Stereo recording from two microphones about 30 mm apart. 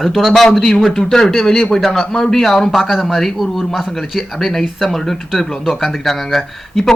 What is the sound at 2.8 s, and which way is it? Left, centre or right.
Speech, centre.